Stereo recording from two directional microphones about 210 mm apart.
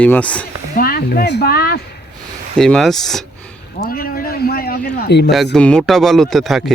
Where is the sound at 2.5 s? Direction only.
Centre (ahead or behind).